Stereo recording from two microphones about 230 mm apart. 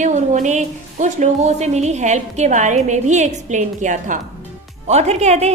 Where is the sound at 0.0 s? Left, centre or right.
Right.